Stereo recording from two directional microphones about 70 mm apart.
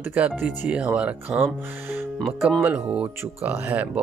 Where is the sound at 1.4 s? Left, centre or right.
Right.